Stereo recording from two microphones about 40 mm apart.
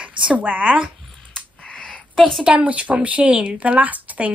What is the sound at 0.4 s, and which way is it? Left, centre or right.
Speech, right.